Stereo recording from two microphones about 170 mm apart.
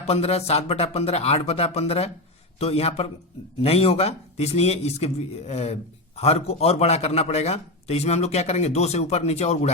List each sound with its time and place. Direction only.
0.0 s a man's voice: 40° left (ahead or behind)